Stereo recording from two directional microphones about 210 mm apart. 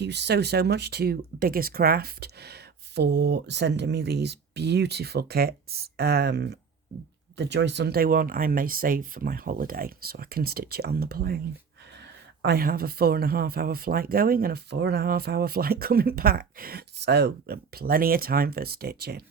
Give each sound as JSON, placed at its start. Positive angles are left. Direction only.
{"t": 0.0, "sound": "speech", "side_deg": -55}